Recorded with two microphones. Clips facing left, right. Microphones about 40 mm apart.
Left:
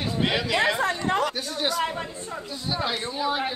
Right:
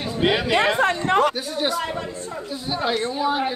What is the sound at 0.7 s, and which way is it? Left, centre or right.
Speech, right.